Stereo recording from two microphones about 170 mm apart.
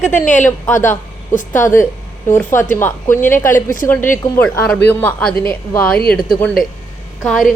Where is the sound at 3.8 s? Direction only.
10° left (ahead or behind).